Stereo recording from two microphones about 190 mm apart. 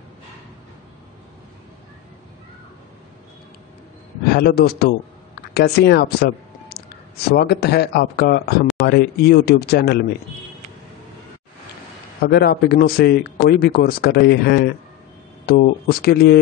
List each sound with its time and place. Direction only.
4.3 s speech: 55° left (ahead or behind)
12.2 s speech: 55° left (ahead or behind)